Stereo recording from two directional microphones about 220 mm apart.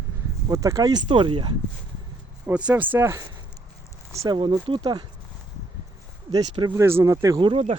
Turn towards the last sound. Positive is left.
turn(degrees=-20)  # may be behind; listen again after turning